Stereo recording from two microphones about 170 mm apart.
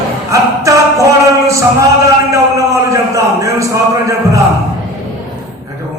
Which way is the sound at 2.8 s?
20° right (ahead or behind).